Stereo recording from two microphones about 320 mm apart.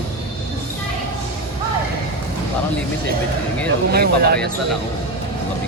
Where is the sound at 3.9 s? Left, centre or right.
Right.